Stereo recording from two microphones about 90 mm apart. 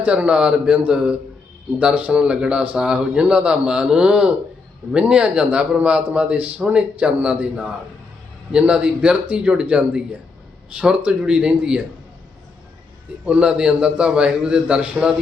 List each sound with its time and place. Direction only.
0.0 s speech: 15° right (ahead or behind)
13.2 s speech: 15° right (ahead or behind)